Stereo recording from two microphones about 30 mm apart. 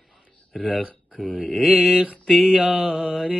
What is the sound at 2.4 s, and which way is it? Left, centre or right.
Speech, right.